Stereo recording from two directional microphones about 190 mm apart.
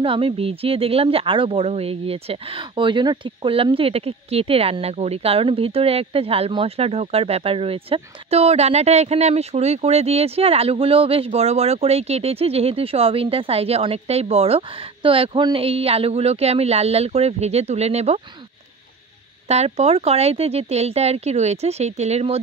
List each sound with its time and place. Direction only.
0.0 s speech: 30° right (ahead or behind)
19.4 s speech: 35° right (ahead or behind)